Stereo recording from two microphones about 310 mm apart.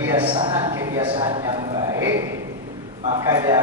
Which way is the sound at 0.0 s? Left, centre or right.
Centre.